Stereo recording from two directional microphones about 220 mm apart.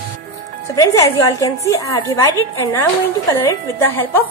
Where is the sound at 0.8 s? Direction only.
15° left (ahead or behind).